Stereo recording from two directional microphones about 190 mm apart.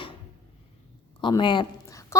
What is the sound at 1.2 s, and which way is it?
A woman's voice, 25° left (ahead or behind).